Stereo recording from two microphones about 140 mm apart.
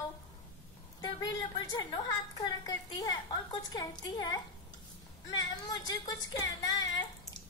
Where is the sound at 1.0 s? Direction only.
30° left (ahead or behind).